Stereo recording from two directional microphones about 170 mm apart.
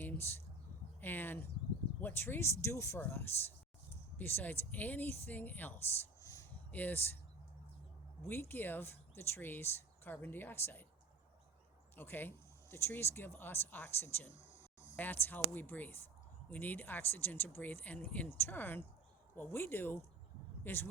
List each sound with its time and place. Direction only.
0.0 s a sound: 10° left (ahead or behind)
1.0 s speech: 10° left (ahead or behind)
8.2 s speech: 15° left (ahead or behind)
11.9 s speech: 10° left (ahead or behind)
14.6 s a sound: 45° left (ahead or behind)
14.9 s speech: 10° left (ahead or behind)